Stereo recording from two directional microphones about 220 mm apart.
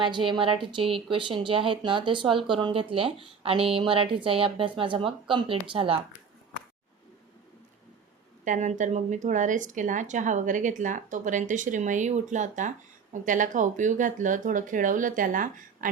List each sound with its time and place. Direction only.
0.0 s speech: 20° right (ahead or behind)
8.4 s speech: 35° right (ahead or behind)